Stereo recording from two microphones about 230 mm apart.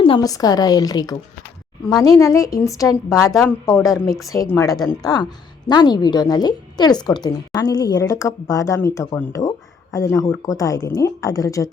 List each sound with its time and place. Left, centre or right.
0.0 s a woman's voice: centre